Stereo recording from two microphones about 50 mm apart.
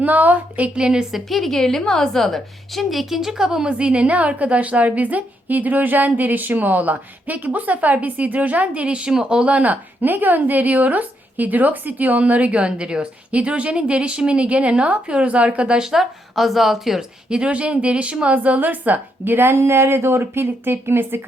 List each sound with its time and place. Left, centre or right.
0.0 s a woman's voice: right
0.8 s a woman's voice: centre
1.3 s a woman's voice: centre; by 15.9 s right
15.9 s a woman's voice: centre
17.2 s a woman's voice: centre; by 21.2 s right